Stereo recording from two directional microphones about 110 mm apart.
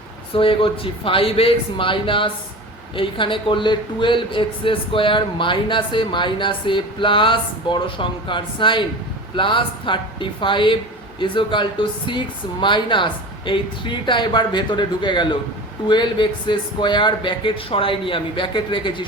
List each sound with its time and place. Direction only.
0.3 s speech: 55° left (ahead or behind)